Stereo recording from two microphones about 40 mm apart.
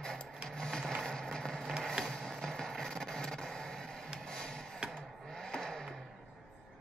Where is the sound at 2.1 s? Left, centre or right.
Centre.